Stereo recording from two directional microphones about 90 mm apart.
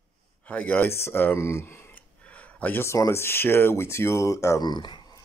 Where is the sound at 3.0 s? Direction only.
30° left (ahead or behind).